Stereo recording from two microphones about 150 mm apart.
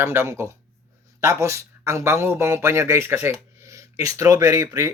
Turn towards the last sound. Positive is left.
turn(degrees=-20)  # may be behind; listen again after turning